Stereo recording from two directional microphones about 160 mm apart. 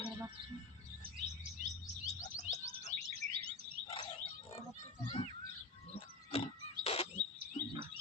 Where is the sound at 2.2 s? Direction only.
45° left (ahead or behind).